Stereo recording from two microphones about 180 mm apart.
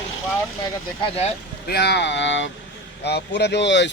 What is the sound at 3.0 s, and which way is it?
Speech, 70° left (ahead or behind).